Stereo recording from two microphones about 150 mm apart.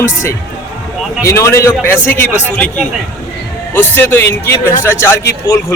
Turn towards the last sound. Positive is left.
turn(degrees=20)  # may be behind; listen again after turning